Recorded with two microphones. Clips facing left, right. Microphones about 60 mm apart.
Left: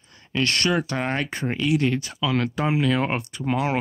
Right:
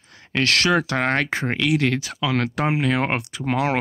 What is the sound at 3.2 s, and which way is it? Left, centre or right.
Speech, right.